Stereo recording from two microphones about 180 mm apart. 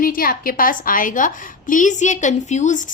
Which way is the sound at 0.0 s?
50° left (ahead or behind).